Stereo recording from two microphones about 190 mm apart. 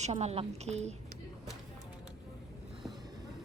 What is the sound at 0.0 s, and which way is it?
Speech, 35° right (ahead or behind).